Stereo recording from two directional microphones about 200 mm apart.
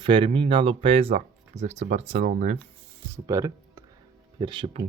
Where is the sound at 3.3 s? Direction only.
15° right (ahead or behind).